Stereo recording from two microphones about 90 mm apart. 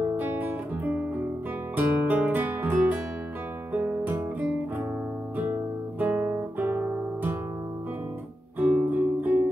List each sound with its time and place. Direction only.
0.2 s guitar: 20° right (ahead or behind)
1.8 s music: 20° right (ahead or behind)
5.9 s guitar: 20° right (ahead or behind)
8.5 s music: 15° right (ahead or behind)